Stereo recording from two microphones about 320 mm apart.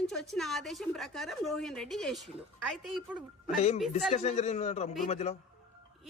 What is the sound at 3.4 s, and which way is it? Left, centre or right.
A man's voice, left.